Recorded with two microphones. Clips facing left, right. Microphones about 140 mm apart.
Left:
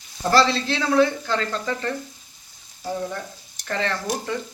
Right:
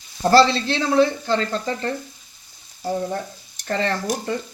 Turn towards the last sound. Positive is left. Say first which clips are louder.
# right 2 dB
turn(degrees=-35)  # may be behind; listen again after turning